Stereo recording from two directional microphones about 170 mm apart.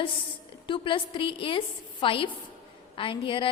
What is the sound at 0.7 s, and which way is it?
A woman's voice, 30° left (ahead or behind).